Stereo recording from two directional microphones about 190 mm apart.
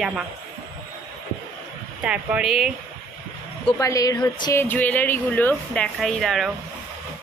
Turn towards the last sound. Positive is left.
turn(degrees=0)  # may be behind; listen again after turning